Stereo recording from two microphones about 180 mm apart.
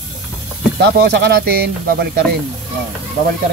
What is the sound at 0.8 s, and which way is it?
Speech, 65° right (ahead or behind).